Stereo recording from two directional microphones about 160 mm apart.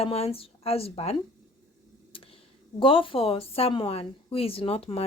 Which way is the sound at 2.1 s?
35° left (ahead or behind).